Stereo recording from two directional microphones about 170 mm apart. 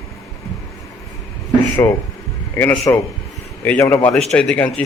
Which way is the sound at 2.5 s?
10° left (ahead or behind).